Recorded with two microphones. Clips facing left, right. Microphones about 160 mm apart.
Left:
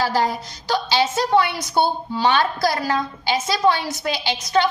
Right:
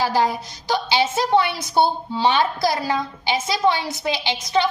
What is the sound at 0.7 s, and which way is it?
A woman's voice, 20° right (ahead or behind).